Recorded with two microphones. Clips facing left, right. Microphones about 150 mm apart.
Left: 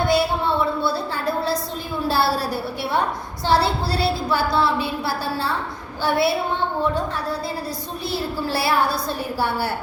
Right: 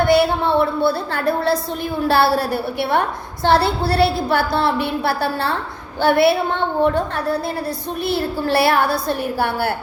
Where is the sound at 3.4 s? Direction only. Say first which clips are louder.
Right 4 dB; 60° right (ahead or behind).